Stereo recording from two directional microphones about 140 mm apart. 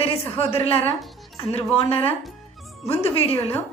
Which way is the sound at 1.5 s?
45° left (ahead or behind).